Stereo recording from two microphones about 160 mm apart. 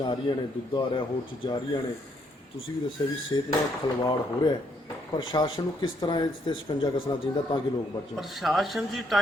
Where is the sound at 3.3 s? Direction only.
25° left (ahead or behind).